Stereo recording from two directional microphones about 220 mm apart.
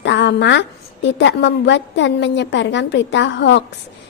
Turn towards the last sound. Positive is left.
turn(degrees=55)  # may be behind; listen again after turning